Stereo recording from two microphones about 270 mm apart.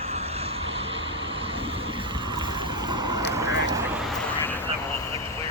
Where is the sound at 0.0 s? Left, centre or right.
Right.